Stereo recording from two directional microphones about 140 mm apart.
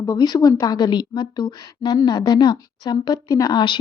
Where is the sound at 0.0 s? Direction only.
25° left (ahead or behind).